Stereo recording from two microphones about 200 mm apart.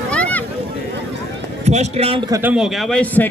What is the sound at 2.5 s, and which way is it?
Speech, centre (ahead or behind).